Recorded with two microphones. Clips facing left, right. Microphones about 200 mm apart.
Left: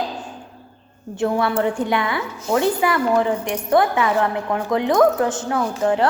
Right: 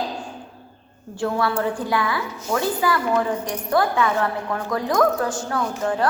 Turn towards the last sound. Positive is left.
turn(degrees=20)  # may be behind; listen again after turning